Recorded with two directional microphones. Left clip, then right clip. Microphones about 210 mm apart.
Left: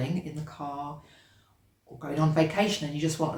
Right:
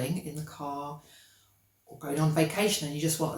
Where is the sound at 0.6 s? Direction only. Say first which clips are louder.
Even; 5° left (ahead or behind).